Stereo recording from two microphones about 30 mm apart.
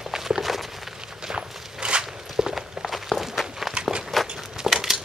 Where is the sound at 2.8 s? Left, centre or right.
Centre.